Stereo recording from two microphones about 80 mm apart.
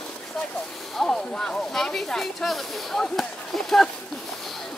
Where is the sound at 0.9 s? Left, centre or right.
Centre.